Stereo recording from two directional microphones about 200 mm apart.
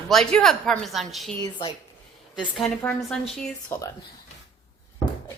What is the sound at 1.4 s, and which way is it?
Speech, 25° left (ahead or behind).